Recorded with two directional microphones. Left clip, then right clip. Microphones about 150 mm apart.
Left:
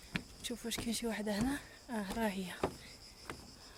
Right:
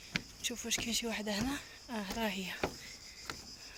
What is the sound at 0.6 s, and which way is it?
Speech, 20° left (ahead or behind).